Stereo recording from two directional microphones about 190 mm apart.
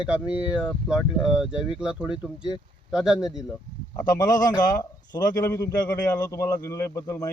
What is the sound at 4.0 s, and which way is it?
A man's voice, 20° left (ahead or behind).